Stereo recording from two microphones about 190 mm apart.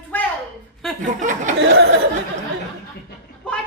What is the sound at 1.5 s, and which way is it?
Speech, 60° right (ahead or behind).